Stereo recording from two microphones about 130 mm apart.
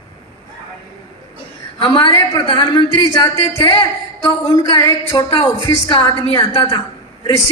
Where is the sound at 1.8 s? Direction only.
35° left (ahead or behind).